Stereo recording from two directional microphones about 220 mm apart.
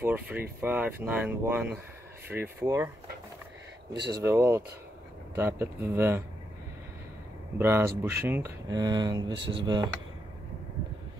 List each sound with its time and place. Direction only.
0.0 s speech: 10° right (ahead or behind)
3.9 s speech: 50° right (ahead or behind)
4.2 s speech: 10° right (ahead or behind)
7.5 s speech: 10° right (ahead or behind)